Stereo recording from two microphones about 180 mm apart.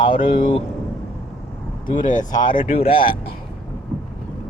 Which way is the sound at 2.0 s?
45° left (ahead or behind).